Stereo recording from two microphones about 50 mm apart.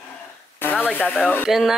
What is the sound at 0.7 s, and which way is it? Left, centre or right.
Speech, left.